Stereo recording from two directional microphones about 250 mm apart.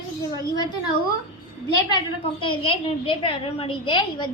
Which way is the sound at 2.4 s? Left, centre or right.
Left.